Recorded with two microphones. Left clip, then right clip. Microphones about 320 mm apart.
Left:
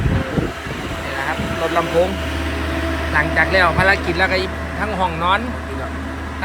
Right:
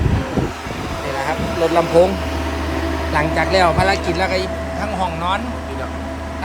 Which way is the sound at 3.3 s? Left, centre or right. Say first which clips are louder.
Even; centre.